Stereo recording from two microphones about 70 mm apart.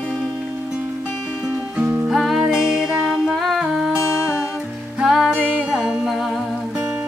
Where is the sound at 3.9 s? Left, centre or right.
Left.